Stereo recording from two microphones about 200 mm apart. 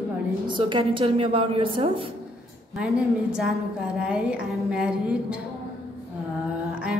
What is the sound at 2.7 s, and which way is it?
A woman's voice, 5° right (ahead or behind).